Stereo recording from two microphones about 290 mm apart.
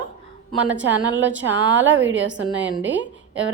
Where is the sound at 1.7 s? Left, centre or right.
Right.